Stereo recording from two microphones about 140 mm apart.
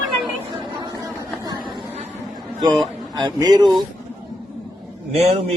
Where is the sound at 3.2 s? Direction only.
30° right (ahead or behind).